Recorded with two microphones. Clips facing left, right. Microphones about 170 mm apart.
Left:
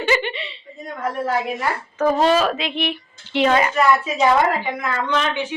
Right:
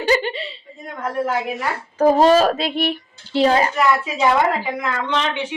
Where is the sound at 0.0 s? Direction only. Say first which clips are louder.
Right 2 dB; 40° right (ahead or behind).